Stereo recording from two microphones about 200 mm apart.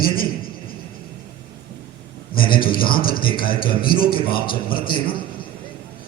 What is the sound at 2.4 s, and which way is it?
A man's voice, 45° left (ahead or behind).